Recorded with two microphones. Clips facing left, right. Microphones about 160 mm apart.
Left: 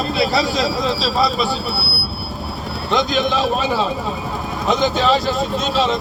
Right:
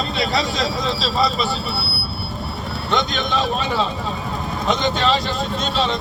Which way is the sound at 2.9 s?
Centre (ahead or behind).